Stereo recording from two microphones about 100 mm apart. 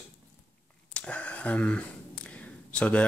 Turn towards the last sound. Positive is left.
turn(degrees=10)  # may be behind; listen again after turning